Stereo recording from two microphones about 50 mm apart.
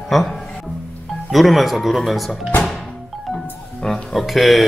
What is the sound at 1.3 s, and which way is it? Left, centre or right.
Speech, centre.